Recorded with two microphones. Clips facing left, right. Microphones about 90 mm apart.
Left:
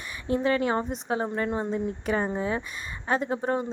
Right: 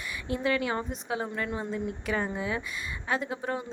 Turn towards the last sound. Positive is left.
turn(degrees=40)  # may be behind; listen again after turning